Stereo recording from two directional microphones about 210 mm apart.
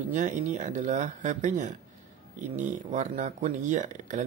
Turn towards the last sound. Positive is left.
turn(degrees=-35)  # may be behind; listen again after turning